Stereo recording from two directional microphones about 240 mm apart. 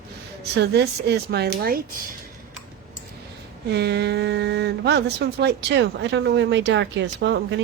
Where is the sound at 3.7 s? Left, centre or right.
Right.